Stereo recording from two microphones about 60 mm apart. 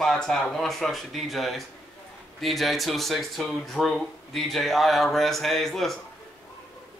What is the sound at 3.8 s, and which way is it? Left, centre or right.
Speech, centre.